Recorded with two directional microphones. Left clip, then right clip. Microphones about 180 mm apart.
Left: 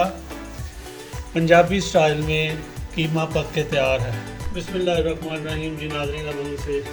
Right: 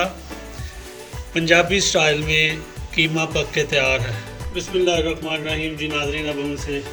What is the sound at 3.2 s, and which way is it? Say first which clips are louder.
Music: right 2 dB; 35° left (ahead or behind).